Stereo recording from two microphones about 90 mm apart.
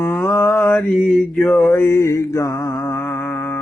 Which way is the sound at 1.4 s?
25° left (ahead or behind).